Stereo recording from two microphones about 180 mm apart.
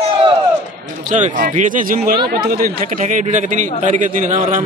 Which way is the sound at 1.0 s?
45° right (ahead or behind).